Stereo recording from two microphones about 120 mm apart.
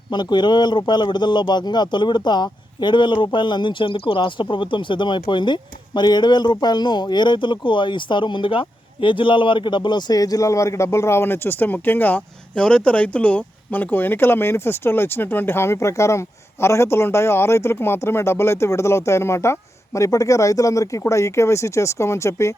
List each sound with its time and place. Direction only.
0.1 s speech: 40° left (ahead or behind)